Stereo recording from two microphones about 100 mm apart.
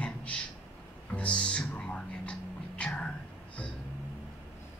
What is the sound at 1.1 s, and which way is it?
Music, 10° left (ahead or behind).